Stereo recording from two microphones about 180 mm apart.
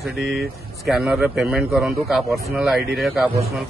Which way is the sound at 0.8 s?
Centre (ahead or behind).